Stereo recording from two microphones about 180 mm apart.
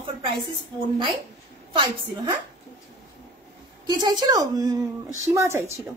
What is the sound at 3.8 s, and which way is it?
A woman's voice, 25° right (ahead or behind).